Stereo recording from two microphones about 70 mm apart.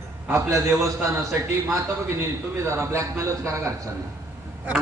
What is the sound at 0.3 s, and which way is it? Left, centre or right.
Speech, right.